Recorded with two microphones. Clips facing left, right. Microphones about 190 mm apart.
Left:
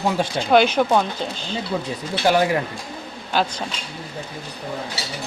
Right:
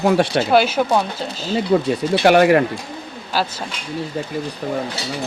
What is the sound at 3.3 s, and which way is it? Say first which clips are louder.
Speech: even; 5° right (ahead or behind).